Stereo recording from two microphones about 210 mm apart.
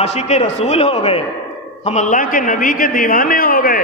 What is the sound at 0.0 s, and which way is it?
A man's voice, 30° left (ahead or behind).